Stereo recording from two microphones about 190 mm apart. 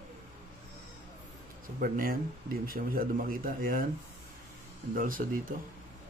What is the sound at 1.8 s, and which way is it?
Speech, 50° right (ahead or behind).